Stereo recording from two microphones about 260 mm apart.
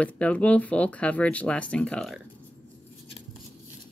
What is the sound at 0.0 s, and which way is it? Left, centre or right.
Speech, centre.